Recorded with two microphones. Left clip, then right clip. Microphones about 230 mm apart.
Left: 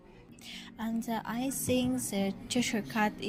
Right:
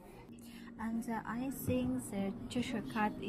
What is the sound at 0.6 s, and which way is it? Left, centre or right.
Speech, left.